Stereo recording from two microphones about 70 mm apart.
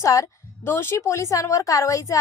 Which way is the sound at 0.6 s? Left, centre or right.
Left.